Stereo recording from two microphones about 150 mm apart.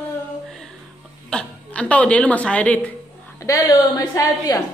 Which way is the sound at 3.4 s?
20° left (ahead or behind).